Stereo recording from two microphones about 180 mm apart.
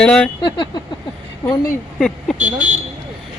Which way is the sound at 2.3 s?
40° right (ahead or behind).